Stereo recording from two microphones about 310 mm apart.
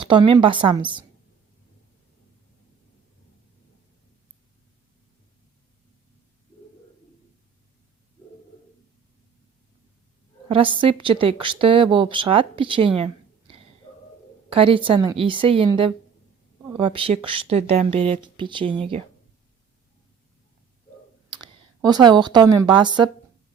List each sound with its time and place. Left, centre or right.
0.0 s a woman's voice: centre
10.5 s a woman's voice: centre
13.9 s a sound: centre
14.5 s a woman's voice: centre
21.2 s a woman's voice: centre